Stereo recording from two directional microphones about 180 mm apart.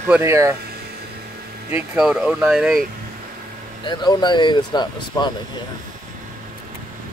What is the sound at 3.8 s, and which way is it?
Speech, 25° left (ahead or behind).